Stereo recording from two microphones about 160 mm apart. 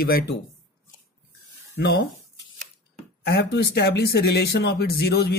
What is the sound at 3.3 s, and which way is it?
Speech, 90° left.